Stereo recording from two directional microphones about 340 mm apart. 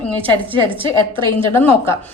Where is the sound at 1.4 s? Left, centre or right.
Centre.